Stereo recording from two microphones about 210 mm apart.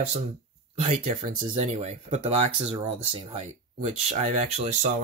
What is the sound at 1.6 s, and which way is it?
Speech, 30° right (ahead or behind).